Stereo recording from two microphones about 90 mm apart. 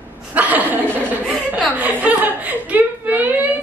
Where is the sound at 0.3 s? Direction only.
15° right (ahead or behind).